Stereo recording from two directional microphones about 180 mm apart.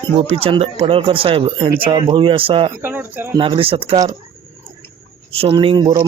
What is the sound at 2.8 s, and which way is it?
Speech, 10° right (ahead or behind).